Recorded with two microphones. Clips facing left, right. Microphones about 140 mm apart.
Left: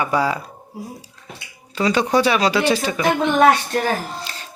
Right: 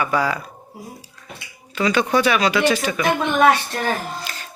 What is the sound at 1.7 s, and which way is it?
Speech, 35° left (ahead or behind).